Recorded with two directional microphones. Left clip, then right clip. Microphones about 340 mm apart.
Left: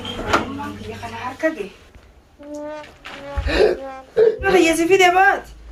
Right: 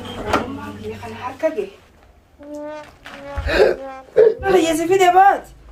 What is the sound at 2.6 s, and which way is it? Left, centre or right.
Speech, centre.